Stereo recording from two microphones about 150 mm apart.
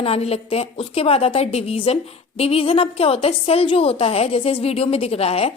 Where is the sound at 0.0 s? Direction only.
40° left (ahead or behind).